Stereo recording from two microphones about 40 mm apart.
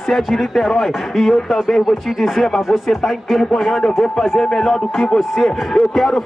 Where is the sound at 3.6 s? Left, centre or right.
Centre.